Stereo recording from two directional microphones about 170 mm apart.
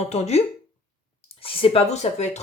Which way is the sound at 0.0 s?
40° left (ahead or behind).